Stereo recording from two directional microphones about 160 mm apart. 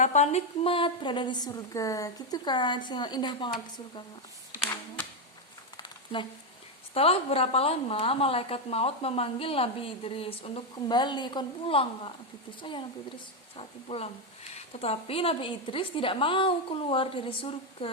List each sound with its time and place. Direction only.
0.0 s a woman's voice: 45° left (ahead or behind); by 3.5 s 25° left (ahead or behind)
5.7 s a sound: 30° left (ahead or behind)
6.9 s a woman's voice: 40° left (ahead or behind)